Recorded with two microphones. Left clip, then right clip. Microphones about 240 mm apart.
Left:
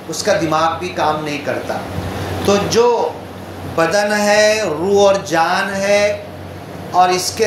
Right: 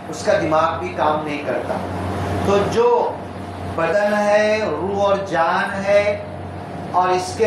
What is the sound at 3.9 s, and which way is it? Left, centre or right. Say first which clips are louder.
Speech: even; left.